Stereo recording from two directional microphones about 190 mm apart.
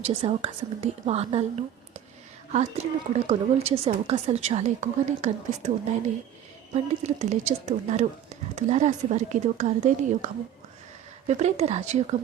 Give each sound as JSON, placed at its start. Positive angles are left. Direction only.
{"t": 0.0, "sound": "a woman's voice", "side_deg": -35}
{"t": 2.5, "sound": "a woman's voice", "side_deg": -35}
{"t": 6.7, "sound": "a woman's voice", "side_deg": -35}